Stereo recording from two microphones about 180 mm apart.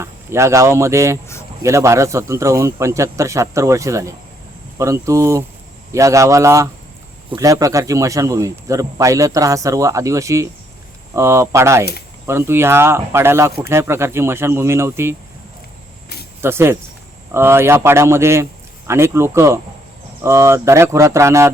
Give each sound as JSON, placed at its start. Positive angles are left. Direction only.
{"t": 0.0, "sound": "a man's voice", "side_deg": -15}
{"t": 16.4, "sound": "a man's voice", "side_deg": -15}